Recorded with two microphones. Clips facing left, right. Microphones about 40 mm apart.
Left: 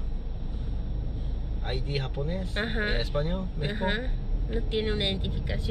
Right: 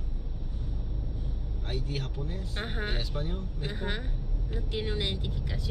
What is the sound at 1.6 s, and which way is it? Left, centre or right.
Speech, left.